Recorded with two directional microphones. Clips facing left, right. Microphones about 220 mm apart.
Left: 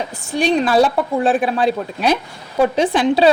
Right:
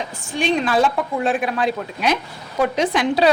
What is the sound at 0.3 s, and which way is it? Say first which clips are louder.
A woman's voice: left 4 dB; 35° left (ahead or behind).